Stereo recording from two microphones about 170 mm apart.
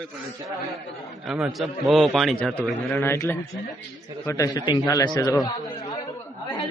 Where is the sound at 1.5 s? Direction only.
Centre (ahead or behind); by 5.3 s 20° left (ahead or behind).